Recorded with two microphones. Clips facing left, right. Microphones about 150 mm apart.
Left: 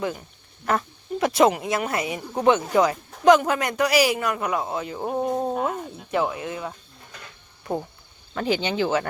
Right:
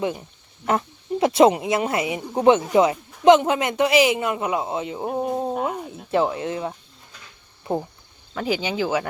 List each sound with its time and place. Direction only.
0.0 s speech: 25° right (ahead or behind)
5.0 s speech: 5° right (ahead or behind)
6.1 s speech: 30° right (ahead or behind)
8.4 s speech: 5° right (ahead or behind)